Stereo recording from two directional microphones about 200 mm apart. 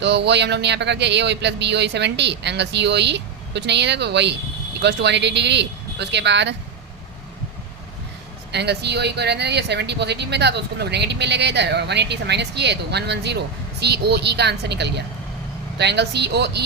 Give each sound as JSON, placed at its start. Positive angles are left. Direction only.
{"t": 0.0, "sound": "speech", "side_deg": -60}
{"t": 8.5, "sound": "speech", "side_deg": -55}